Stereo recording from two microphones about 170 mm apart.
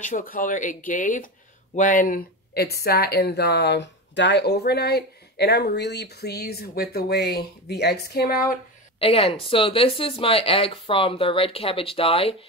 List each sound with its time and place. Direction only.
0.0 s speech: 55° left (ahead or behind)
9.0 s speech: 35° left (ahead or behind)